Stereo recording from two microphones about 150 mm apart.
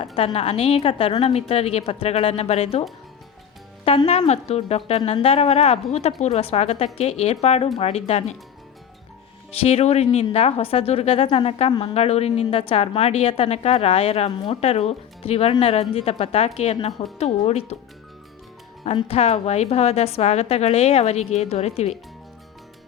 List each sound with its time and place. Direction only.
0.3 s a woman's voice: 45° left (ahead or behind)
3.8 s a woman's voice: 45° left (ahead or behind)
9.5 s a woman's voice: 45° left (ahead or behind)
18.9 s a woman's voice: 40° left (ahead or behind)